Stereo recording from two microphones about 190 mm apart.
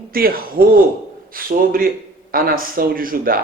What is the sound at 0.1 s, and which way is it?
A man's voice, 50° right (ahead or behind).